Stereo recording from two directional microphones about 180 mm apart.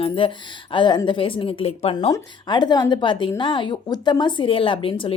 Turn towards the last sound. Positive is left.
turn(degrees=30)  # may be behind; listen again after turning